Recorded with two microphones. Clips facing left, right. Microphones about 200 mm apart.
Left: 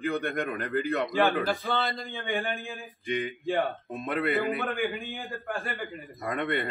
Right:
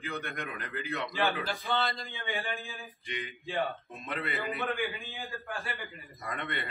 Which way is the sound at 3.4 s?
55° left (ahead or behind).